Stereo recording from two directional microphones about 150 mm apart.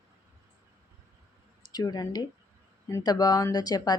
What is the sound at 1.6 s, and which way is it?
Speech, 25° left (ahead or behind).